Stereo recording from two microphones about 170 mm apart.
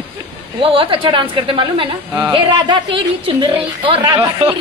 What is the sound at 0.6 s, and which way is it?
A woman's voice, 30° right (ahead or behind).